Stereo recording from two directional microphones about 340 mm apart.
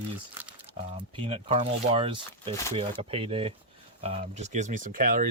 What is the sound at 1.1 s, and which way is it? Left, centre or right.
Speech, centre.